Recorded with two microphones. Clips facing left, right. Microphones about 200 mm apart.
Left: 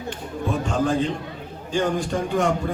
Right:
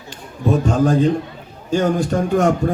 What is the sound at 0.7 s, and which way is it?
A man's voice, 40° right (ahead or behind).